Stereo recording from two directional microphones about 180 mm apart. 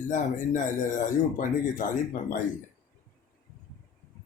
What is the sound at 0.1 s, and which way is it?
Speech, 45° left (ahead or behind).